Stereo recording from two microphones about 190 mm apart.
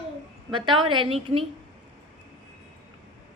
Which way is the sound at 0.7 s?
25° right (ahead or behind).